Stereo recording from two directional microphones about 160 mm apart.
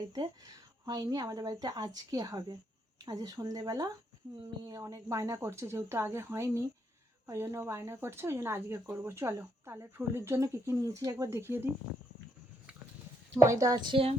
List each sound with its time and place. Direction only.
0.1 s speech: 25° right (ahead or behind)
13.4 s speech: 20° right (ahead or behind); by 14.2 s 35° right (ahead or behind)